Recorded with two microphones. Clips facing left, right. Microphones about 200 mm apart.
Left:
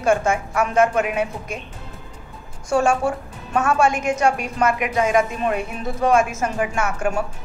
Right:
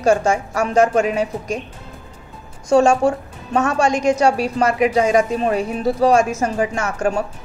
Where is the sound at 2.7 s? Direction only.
40° right (ahead or behind).